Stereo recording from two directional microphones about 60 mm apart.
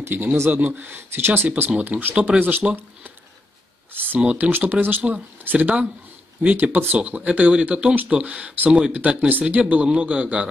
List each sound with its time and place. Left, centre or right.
0.1 s speech: right
1.7 s speech: right
3.9 s a sound: right
4.4 s speech: right
7.0 s speech: right